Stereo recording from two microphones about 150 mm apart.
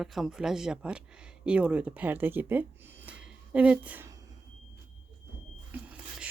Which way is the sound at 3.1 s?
10° right (ahead or behind).